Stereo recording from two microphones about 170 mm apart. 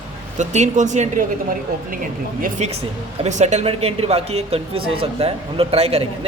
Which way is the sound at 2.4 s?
40° right (ahead or behind).